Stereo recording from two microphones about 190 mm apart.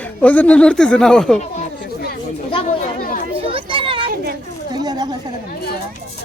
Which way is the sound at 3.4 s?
30° right (ahead or behind).